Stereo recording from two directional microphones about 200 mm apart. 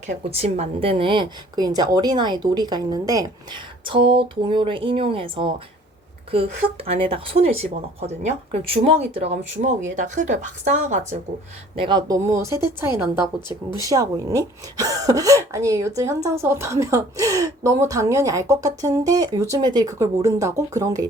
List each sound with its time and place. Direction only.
0.1 s a woman's voice: 30° right (ahead or behind)
11.8 s speech: 20° right (ahead or behind)
13.8 s speech: 15° right (ahead or behind)